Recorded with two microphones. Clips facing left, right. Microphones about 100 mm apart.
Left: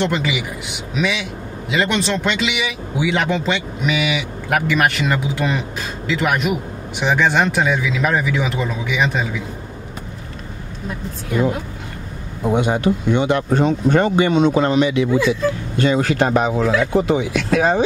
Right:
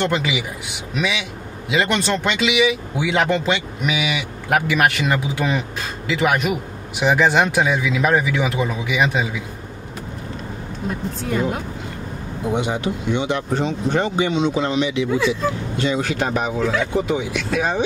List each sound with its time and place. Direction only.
0.0 s speech: centre (ahead or behind)
12.5 s speech: 50° left (ahead or behind)